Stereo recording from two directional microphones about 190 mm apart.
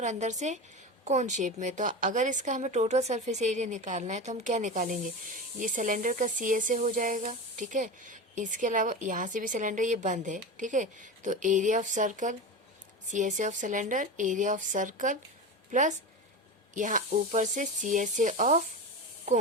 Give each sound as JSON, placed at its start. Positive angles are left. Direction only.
{"t": 0.0, "sound": "a woman's voice", "side_deg": -40}